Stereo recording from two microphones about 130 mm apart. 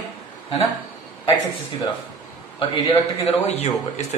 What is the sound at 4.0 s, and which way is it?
Speech, 60° left (ahead or behind).